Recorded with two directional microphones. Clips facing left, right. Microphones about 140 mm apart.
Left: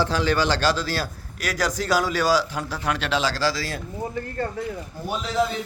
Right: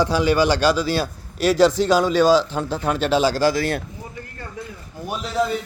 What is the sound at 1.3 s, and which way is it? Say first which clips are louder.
Speech: right 10 dB; 25° right (ahead or behind).